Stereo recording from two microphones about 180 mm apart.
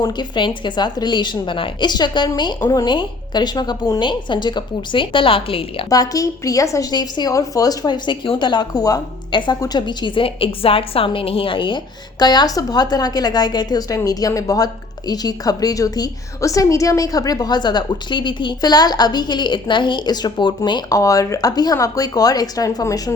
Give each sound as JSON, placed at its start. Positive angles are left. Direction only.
{"t": 0.0, "sound": "a woman's voice", "side_deg": 25}